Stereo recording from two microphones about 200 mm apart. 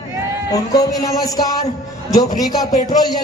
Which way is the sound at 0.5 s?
15° left (ahead or behind).